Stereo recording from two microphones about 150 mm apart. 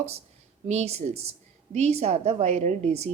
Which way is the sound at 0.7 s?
45° right (ahead or behind).